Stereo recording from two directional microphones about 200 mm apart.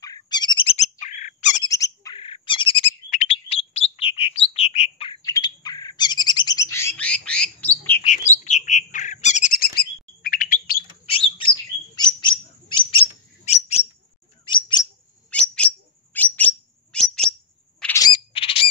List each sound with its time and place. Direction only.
0.0 s bird: 20° left (ahead or behind); by 1.6 s 35° left (ahead or behind)
1.6 s bird: 15° left (ahead or behind)
5.2 s bird: 20° left (ahead or behind)
8.0 s bird: 35° left (ahead or behind)
11.1 s bird: 25° left (ahead or behind)
15.3 s bird: 5° left (ahead or behind)
17.9 s bird: 20° left (ahead or behind)